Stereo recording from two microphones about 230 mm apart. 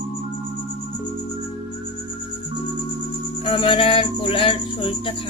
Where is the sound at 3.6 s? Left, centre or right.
Left.